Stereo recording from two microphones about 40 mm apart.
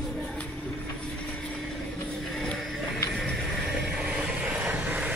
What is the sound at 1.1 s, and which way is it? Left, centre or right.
Vehicle, left.